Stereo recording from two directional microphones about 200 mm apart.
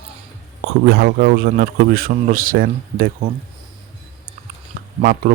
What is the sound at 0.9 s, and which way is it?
A man's voice, 50° right (ahead or behind).